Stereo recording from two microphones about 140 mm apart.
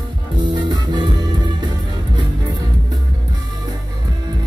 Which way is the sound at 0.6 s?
30° right (ahead or behind).